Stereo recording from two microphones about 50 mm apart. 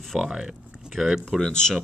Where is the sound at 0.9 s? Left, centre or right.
Centre.